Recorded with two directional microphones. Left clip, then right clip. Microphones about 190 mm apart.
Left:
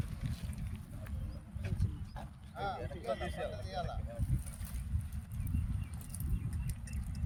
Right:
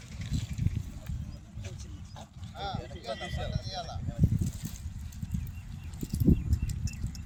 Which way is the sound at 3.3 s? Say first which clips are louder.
Right 2 dB; 5° left (ahead or behind).